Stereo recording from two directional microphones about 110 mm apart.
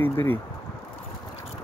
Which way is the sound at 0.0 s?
20° left (ahead or behind).